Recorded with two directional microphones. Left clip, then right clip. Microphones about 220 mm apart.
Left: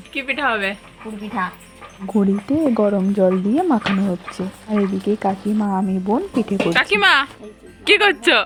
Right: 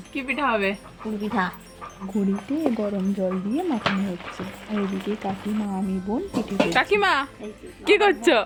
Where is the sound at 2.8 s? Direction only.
25° left (ahead or behind).